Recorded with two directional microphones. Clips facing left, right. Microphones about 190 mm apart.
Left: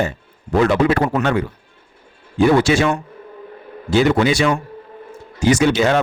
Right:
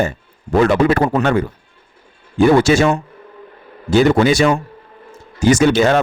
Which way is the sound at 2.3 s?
45° right (ahead or behind).